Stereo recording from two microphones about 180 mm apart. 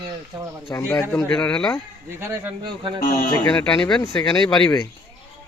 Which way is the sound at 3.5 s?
5° left (ahead or behind).